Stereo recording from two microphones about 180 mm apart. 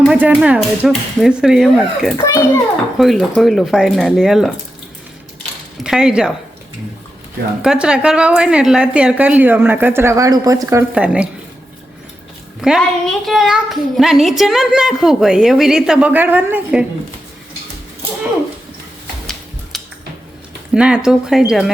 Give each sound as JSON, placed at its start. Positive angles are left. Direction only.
{"t": 0.0, "sound": "a child's voice", "side_deg": -5}
{"t": 2.1, "sound": "a child's voice", "side_deg": 20}
{"t": 3.0, "sound": "a child's voice", "side_deg": 0}
{"t": 5.8, "sound": "a child's voice", "side_deg": -5}
{"t": 7.6, "sound": "a woman's voice", "side_deg": -5}
{"t": 12.6, "sound": "a child's voice", "side_deg": 0}
{"t": 19.7, "sound": "a sound", "side_deg": 0}
{"t": 20.7, "sound": "a child's voice", "side_deg": -5}